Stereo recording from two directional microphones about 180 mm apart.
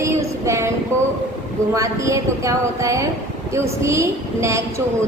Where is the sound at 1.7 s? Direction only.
15° right (ahead or behind).